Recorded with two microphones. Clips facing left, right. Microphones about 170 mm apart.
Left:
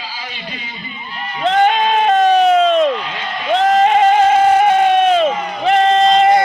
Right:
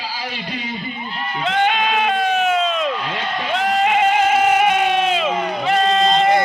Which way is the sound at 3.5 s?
40° left (ahead or behind).